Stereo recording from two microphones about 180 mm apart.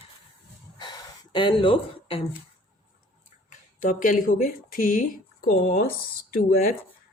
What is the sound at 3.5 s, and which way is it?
Speech, 45° left (ahead or behind).